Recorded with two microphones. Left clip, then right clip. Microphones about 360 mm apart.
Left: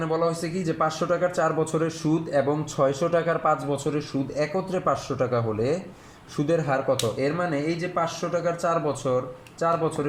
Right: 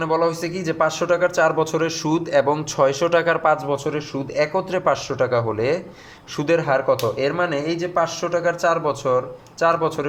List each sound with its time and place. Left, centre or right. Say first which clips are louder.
0.0 s speech: right 5 dB; right